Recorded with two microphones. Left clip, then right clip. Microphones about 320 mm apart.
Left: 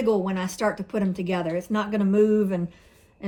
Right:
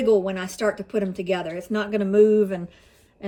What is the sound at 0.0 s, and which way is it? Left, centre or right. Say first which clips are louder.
Speech: right 4 dB; centre.